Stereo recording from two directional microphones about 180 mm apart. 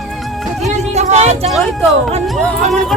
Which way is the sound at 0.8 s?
40° right (ahead or behind).